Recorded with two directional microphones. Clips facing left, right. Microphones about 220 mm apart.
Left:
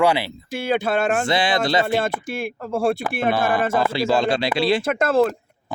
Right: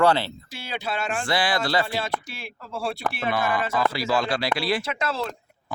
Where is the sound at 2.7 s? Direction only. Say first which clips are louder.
Left 7 dB; 50° left (ahead or behind).